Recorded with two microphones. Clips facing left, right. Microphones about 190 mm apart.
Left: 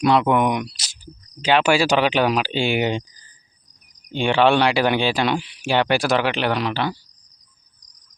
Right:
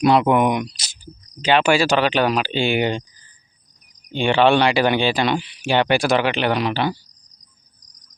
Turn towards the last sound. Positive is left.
turn(degrees=-5)  # may be behind; listen again after turning